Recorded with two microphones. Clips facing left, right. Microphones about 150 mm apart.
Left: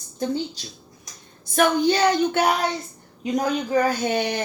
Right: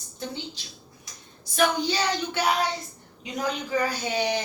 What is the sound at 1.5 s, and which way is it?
Speech, 55° left (ahead or behind).